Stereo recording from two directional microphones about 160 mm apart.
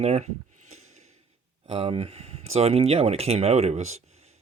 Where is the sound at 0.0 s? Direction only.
45° right (ahead or behind).